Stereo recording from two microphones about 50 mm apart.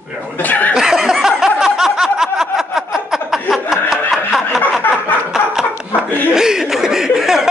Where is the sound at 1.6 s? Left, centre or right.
Centre.